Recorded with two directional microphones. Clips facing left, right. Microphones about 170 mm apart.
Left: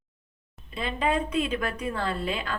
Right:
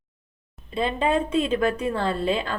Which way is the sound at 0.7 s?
25° right (ahead or behind).